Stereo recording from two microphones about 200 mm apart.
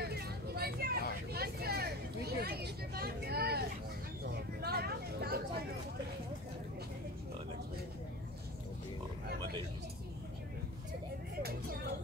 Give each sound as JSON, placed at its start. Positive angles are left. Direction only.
{"t": 0.0, "sound": "vehicle", "side_deg": -50}